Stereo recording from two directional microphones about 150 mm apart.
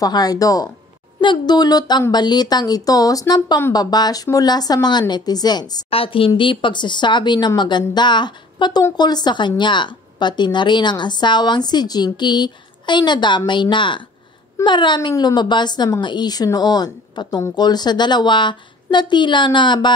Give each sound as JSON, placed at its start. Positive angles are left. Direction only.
{"t": 0.0, "sound": "a woman's voice", "side_deg": 25}
{"t": 5.9, "sound": "a woman's voice", "side_deg": 40}